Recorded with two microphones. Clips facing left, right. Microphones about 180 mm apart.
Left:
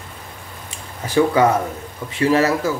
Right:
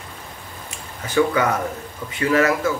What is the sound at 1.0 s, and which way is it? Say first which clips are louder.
Speech: left 3 dB; 30° left (ahead or behind).